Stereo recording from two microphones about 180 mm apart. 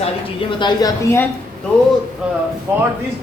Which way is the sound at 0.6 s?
25° left (ahead or behind).